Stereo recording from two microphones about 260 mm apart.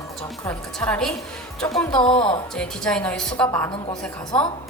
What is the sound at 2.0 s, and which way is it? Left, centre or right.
Speech, left.